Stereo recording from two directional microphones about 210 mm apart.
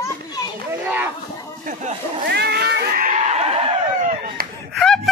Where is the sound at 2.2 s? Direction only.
50° right (ahead or behind); by 3.6 s 30° right (ahead or behind).